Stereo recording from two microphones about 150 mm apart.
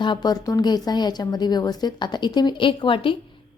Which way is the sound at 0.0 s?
30° left (ahead or behind).